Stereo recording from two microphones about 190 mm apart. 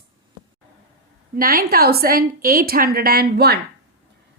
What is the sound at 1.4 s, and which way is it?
A woman's voice, 50° right (ahead or behind).